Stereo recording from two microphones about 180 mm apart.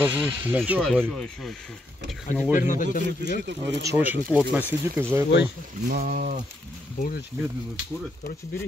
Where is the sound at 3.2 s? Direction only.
75° right (ahead or behind).